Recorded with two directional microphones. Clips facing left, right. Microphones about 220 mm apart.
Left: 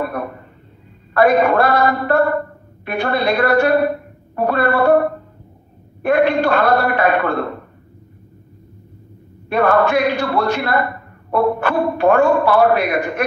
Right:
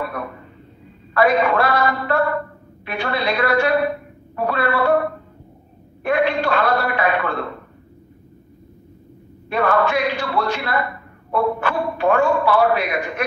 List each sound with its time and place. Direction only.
0.0 s a sound: 45° left (ahead or behind)
1.1 s a woman's voice: 50° left (ahead or behind)
9.5 s a man's voice: 50° left (ahead or behind)